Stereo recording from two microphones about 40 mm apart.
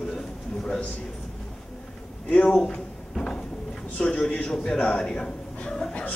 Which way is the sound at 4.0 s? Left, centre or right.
Left.